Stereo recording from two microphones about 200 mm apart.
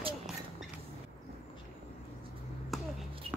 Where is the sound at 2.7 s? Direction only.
Centre (ahead or behind).